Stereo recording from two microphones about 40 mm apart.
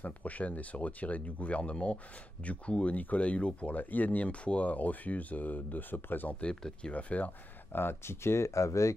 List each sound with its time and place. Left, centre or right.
0.0 s speech: left
6.4 s speech: left
6.9 s speech: left
7.7 s speech: left